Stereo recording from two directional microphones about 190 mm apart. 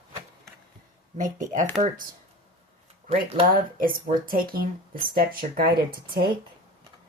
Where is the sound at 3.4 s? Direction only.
50° right (ahead or behind).